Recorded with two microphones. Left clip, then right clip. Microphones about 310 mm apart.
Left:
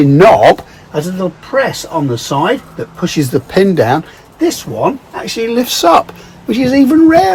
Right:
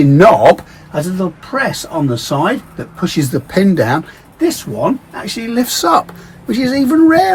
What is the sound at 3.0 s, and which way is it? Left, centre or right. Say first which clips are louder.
Speech: left 2 dB; centre.